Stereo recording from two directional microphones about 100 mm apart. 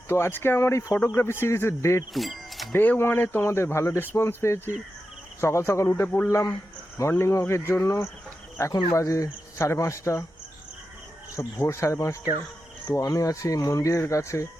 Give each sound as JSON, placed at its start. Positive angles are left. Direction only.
{"t": 0.1, "sound": "speech", "side_deg": 20}
{"t": 2.1, "sound": "music", "side_deg": 0}
{"t": 2.7, "sound": "speech", "side_deg": 20}
{"t": 11.3, "sound": "speech", "side_deg": 30}